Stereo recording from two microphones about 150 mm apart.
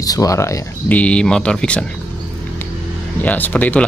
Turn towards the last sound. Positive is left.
turn(degrees=10)  # may be behind; listen again after turning